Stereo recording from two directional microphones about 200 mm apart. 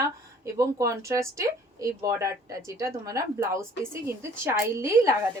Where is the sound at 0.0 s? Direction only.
15° right (ahead or behind).